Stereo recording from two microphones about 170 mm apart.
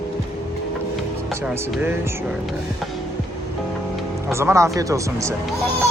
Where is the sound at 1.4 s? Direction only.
10° right (ahead or behind).